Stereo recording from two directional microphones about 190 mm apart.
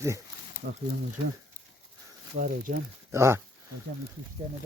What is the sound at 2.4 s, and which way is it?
Speech, 45° right (ahead or behind).